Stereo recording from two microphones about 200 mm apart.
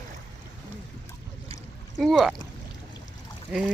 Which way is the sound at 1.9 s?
Centre (ahead or behind).